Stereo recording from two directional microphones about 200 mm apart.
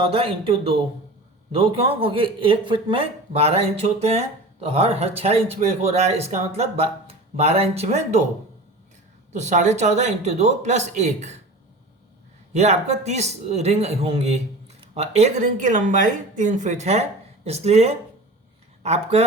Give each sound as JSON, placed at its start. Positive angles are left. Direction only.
{"t": 0.0, "sound": "speech", "side_deg": -30}
{"t": 9.3, "sound": "speech", "side_deg": -35}
{"t": 12.5, "sound": "speech", "side_deg": -35}